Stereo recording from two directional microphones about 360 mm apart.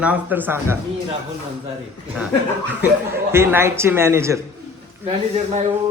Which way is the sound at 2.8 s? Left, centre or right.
Centre.